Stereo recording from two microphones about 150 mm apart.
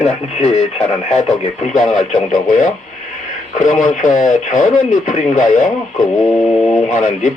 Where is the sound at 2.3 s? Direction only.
60° left (ahead or behind).